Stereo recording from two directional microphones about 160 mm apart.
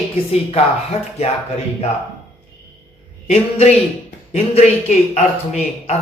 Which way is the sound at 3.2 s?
40° left (ahead or behind).